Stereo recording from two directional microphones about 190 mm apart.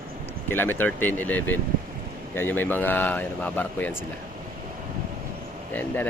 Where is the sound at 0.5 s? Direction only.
10° left (ahead or behind).